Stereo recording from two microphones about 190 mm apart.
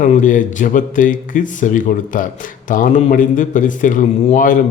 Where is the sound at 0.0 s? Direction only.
40° left (ahead or behind).